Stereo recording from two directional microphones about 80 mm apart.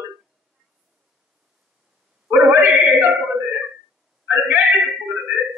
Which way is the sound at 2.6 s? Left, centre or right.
Right.